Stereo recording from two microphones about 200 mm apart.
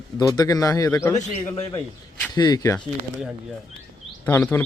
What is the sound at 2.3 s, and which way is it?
Speech, 20° left (ahead or behind).